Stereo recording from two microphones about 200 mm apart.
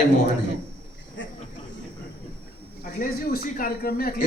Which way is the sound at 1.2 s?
65° left (ahead or behind).